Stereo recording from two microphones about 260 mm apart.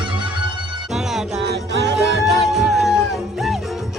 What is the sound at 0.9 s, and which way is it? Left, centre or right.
Music, centre.